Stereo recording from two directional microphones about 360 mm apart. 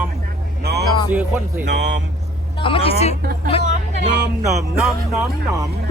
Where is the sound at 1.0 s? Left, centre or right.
Centre.